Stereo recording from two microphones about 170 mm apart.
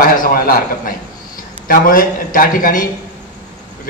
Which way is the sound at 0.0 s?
55° left (ahead or behind).